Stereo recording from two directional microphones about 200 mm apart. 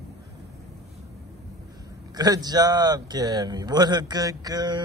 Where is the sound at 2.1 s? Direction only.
20° right (ahead or behind).